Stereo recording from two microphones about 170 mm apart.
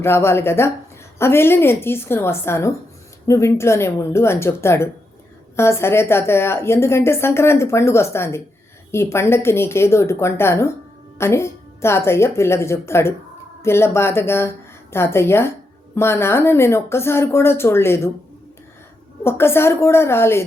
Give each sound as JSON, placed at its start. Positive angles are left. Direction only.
{"t": 0.0, "sound": "a woman's voice", "side_deg": 15}
{"t": 19.2, "sound": "a woman's voice", "side_deg": 15}